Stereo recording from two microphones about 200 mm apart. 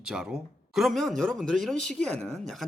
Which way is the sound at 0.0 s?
5° right (ahead or behind).